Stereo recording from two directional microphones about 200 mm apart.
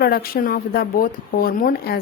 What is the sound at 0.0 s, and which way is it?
Speech, 50° left (ahead or behind).